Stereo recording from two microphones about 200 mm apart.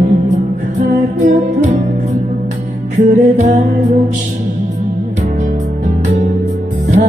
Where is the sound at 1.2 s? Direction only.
35° right (ahead or behind).